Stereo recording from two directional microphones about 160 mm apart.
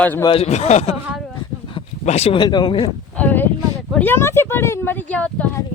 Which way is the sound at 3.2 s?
10° left (ahead or behind).